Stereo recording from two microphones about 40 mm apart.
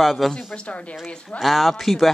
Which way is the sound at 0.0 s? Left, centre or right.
Centre.